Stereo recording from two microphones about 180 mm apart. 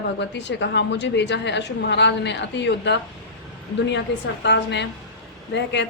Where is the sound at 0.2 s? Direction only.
75° left (ahead or behind).